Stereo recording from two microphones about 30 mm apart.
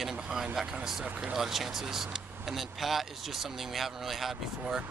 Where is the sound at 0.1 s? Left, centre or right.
Centre.